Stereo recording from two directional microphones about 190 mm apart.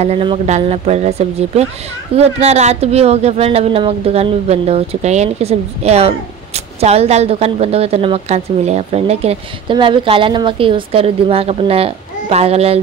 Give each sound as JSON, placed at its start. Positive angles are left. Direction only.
{"t": 0.0, "sound": "speech", "side_deg": -30}